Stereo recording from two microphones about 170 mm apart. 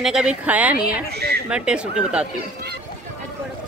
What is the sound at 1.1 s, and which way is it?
Speech, 70° right (ahead or behind).